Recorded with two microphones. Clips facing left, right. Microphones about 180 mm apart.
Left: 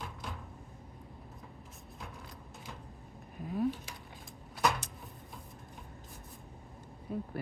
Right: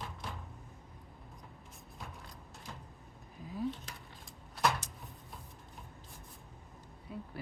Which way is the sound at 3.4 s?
60° left (ahead or behind).